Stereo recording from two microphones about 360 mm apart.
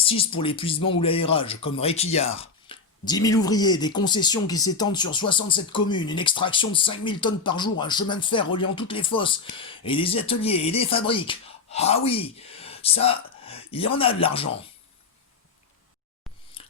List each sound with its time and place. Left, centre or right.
0.0 s speech: centre